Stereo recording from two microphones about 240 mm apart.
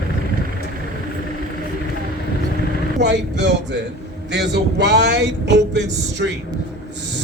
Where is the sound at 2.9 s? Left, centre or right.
Right.